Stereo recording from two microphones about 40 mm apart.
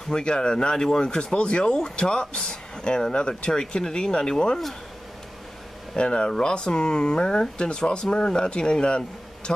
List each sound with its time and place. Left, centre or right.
0.1 s speech: centre
5.9 s speech: left